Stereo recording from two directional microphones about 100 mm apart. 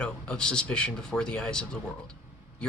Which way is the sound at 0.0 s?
10° left (ahead or behind).